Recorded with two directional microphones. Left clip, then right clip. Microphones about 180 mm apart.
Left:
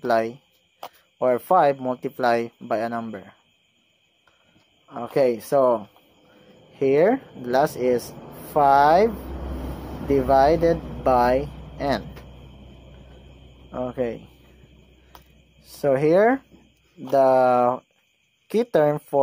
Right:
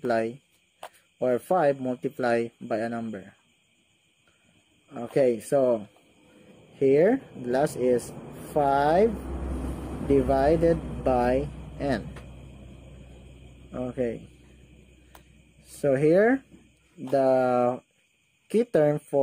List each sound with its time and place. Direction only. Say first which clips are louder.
0.0 s speech: left 5 dB; 15° right (ahead or behind)
5.1 s speech: left 3 dB; 15° right (ahead or behind)
13.7 s speech: left 3 dB; 20° right (ahead or behind)
15.6 s speech: left 3 dB; 15° right (ahead or behind)